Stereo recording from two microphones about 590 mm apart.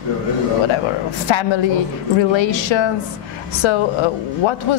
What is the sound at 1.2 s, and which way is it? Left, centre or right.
Speech, left.